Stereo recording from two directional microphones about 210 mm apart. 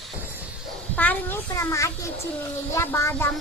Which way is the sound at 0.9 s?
10° left (ahead or behind).